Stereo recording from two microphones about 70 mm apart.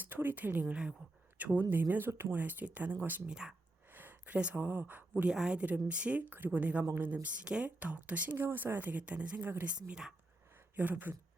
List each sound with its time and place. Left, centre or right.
0.0 s speech: right
3.2 s speech: centre
3.9 s a sound: right
4.4 s speech: right
5.3 s speech: centre; by 9.9 s right
9.9 s speech: centre
10.8 s speech: right